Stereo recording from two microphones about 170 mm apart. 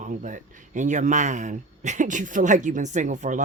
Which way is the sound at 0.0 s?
50° right (ahead or behind).